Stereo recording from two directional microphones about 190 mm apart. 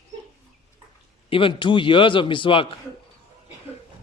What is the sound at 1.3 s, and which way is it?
Speech, 25° left (ahead or behind).